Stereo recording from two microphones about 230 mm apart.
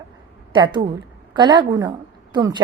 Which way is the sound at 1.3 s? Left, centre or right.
Centre.